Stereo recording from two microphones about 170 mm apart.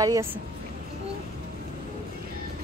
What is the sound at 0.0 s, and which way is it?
Speech, 15° right (ahead or behind).